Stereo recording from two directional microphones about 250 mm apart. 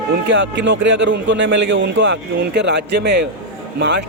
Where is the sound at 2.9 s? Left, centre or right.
Right.